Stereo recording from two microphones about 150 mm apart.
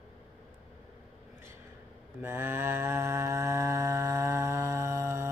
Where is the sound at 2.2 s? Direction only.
15° right (ahead or behind).